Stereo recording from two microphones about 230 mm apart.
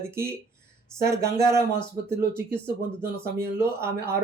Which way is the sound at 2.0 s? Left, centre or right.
Centre.